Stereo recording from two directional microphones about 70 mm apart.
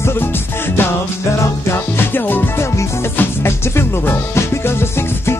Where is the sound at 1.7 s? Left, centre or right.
Left.